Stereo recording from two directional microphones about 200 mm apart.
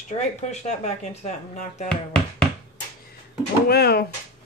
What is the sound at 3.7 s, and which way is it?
Speech, 50° left (ahead or behind).